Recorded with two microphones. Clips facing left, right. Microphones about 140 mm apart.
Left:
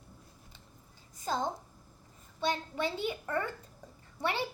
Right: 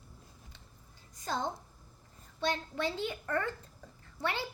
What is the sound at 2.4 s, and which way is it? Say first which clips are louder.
A child's voice: left 1 dB; 10° left (ahead or behind).